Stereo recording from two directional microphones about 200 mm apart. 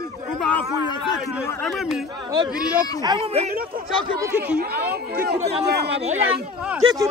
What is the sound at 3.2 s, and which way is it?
Speech, 30° right (ahead or behind).